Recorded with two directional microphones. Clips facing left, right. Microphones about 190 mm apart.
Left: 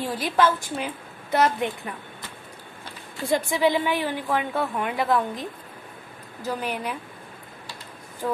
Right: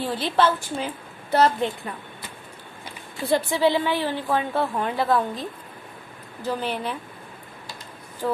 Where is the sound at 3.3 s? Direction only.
30° right (ahead or behind).